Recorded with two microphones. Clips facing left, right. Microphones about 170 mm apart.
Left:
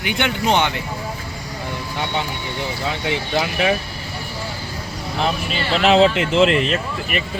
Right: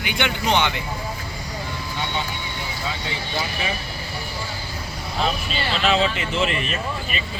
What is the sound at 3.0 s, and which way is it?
Speech, 70° left (ahead or behind).